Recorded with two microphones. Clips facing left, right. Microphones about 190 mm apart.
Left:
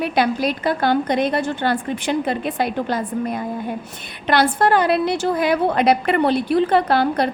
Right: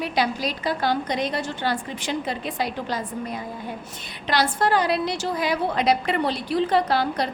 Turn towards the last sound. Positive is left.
turn(degrees=60)  # may be behind; listen again after turning